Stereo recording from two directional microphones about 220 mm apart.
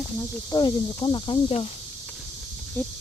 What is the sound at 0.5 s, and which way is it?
Speech, 20° left (ahead or behind).